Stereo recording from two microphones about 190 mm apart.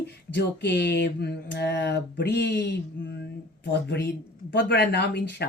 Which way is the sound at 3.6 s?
65° left (ahead or behind).